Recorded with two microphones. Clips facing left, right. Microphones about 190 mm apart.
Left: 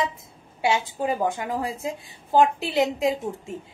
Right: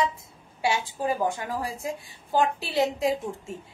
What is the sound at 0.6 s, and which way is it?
A woman's voice, 20° left (ahead or behind).